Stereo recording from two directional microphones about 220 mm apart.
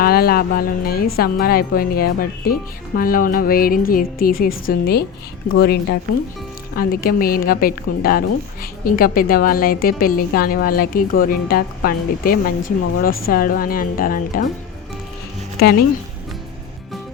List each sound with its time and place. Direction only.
0.0 s speech: 45° left (ahead or behind)